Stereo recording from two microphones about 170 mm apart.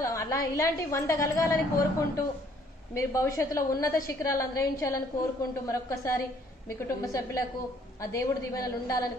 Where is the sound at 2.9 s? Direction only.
15° left (ahead or behind).